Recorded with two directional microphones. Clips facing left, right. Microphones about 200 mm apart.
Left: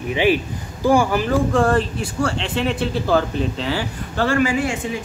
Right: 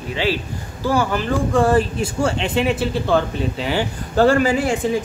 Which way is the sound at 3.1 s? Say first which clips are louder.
Even; centre (ahead or behind).